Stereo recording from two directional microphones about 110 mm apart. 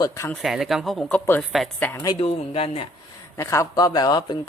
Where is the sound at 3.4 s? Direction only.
25° left (ahead or behind).